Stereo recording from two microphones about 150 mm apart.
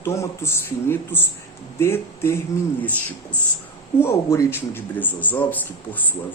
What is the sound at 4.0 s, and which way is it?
Speech, 15° left (ahead or behind).